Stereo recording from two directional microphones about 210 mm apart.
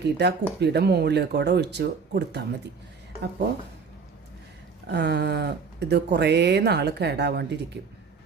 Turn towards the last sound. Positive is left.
turn(degrees=-55)  # may be behind; listen again after turning